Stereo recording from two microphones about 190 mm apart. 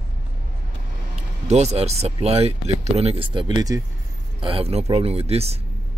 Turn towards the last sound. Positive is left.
turn(degrees=-30)  # may be behind; listen again after turning